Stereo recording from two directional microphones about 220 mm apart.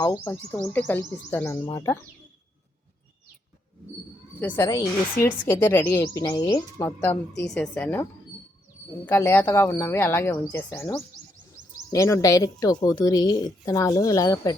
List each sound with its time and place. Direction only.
0.3 s speech: 5° left (ahead or behind)
4.4 s speech: 10° left (ahead or behind)
9.0 s speech: 10° left (ahead or behind)